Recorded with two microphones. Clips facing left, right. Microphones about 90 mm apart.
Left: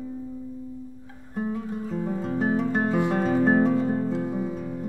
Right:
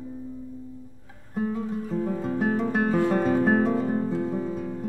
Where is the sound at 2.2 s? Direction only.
Centre (ahead or behind).